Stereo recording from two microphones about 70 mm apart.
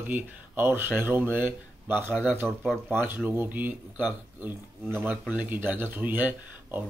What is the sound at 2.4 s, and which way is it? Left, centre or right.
Speech, centre.